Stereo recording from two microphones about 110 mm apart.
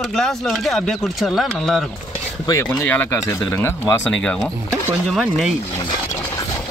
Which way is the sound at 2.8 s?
15° left (ahead or behind).